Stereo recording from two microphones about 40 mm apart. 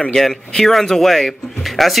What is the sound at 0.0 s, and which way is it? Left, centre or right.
Speech, centre.